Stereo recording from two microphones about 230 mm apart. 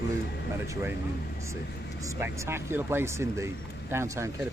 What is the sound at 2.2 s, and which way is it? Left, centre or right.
Speech, centre.